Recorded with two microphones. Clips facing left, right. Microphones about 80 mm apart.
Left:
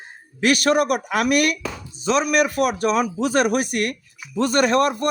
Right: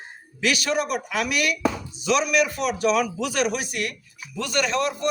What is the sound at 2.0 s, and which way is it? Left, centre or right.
Speech, left.